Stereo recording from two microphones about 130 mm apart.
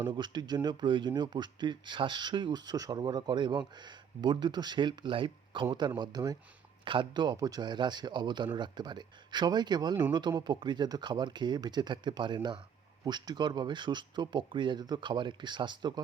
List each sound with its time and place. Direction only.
0.0 s speech: 35° right (ahead or behind)